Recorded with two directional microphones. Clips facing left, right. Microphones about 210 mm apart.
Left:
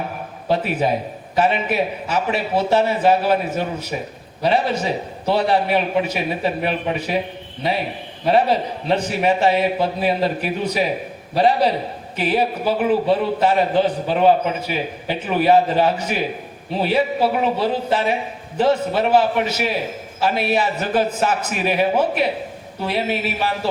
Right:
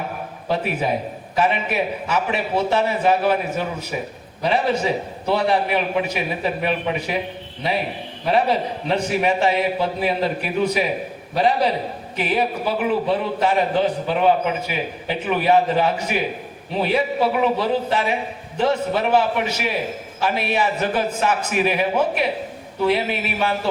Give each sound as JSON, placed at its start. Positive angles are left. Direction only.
{"t": 0.4, "sound": "a man's voice", "side_deg": 35}
{"t": 4.4, "sound": "a man's voice", "side_deg": 35}
{"t": 8.9, "sound": "a man's voice", "side_deg": 35}